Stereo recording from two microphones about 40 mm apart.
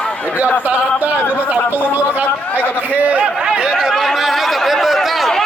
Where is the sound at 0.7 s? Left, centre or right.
Right.